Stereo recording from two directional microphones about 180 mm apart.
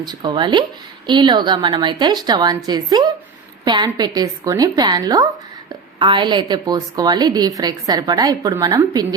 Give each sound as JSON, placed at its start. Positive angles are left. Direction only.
{"t": 0.0, "sound": "a woman's voice", "side_deg": -25}